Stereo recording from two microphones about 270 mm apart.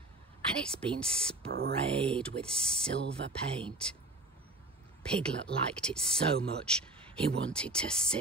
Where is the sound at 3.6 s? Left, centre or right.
Centre.